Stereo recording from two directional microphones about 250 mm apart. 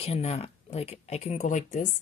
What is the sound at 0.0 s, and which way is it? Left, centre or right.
Speech, left.